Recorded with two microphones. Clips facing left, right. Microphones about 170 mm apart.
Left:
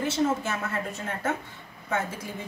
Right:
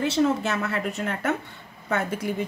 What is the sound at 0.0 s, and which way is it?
A woman's voice, 70° right (ahead or behind).